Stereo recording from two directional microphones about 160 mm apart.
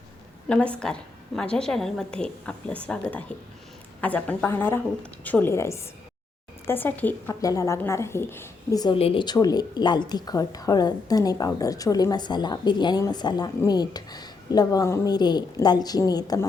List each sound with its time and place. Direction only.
0.4 s a woman's voice: 5° left (ahead or behind); by 9.0 s 25° left (ahead or behind)
9.0 s speech: 35° left (ahead or behind)